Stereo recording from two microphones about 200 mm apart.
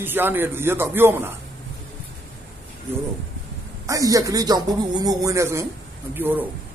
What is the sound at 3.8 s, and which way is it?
A woman's voice, 15° right (ahead or behind).